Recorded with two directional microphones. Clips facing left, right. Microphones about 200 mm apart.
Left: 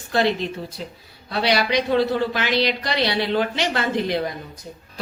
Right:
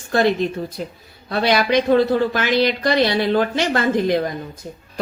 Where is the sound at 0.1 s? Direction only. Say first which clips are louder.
Right 3 dB; 50° right (ahead or behind).